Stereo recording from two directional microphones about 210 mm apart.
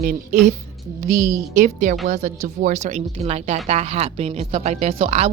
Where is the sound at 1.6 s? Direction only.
40° right (ahead or behind).